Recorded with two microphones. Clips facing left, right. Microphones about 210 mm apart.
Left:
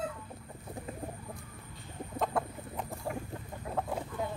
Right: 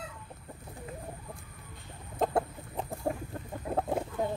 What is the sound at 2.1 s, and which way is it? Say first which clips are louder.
Chicken: right 4 dB; 30° right (ahead or behind).